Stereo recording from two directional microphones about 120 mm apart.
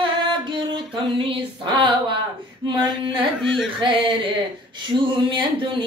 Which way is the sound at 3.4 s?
Centre (ahead or behind).